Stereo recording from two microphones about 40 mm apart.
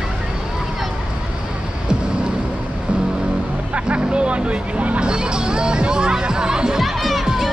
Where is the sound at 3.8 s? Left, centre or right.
Right.